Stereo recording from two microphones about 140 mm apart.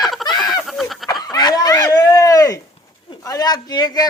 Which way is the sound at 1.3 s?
30° left (ahead or behind).